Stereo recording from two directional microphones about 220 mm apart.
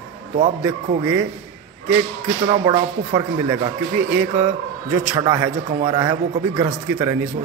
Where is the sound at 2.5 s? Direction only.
20° right (ahead or behind).